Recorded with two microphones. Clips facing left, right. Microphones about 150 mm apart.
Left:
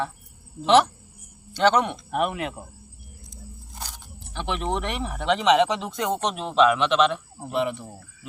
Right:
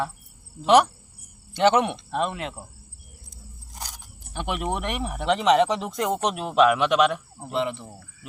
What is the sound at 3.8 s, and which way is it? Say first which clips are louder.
Speech: even; 10° right (ahead or behind).